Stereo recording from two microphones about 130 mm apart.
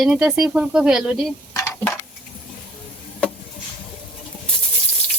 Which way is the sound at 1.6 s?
25° left (ahead or behind).